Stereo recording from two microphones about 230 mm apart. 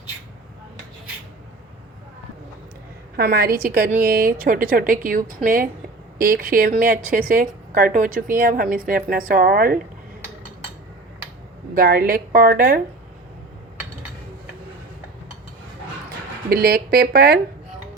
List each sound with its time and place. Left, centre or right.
3.2 s a woman's voice: right
11.7 s a woman's voice: right
16.5 s speech: right